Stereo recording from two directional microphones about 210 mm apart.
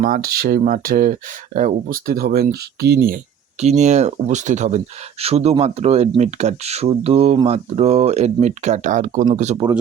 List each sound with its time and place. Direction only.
0.0 s speech: 45° right (ahead or behind)
3.6 s speech: 30° right (ahead or behind)